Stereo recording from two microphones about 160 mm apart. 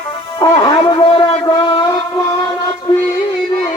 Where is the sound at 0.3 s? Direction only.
30° left (ahead or behind).